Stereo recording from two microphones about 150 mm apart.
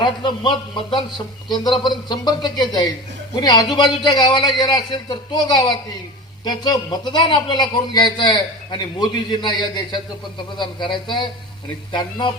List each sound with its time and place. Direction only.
0.0 s a man's voice: 30° left (ahead or behind)